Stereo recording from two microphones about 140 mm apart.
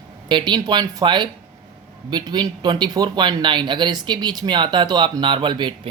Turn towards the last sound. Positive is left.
turn(degrees=-35)  # may be behind; listen again after turning